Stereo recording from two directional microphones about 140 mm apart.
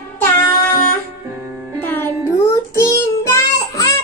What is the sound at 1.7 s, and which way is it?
Music, 15° left (ahead or behind).